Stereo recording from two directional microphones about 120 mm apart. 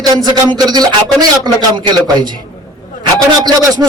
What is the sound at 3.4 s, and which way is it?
Speech, 35° right (ahead or behind).